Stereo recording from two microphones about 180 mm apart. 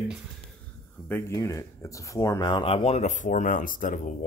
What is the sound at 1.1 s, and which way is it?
Speech, 15° left (ahead or behind).